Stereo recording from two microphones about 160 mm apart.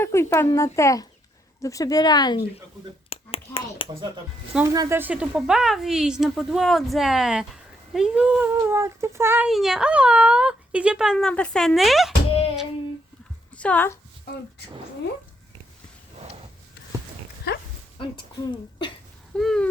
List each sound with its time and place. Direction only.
0.0 s speech: 15° left (ahead or behind)
3.1 s finger snapping: 35° left (ahead or behind)
4.5 s speech: 20° right (ahead or behind)
9.5 s speech: centre (ahead or behind)
13.6 s speech: 10° left (ahead or behind)
17.9 s speech: 30° left (ahead or behind)
19.4 s speech: centre (ahead or behind)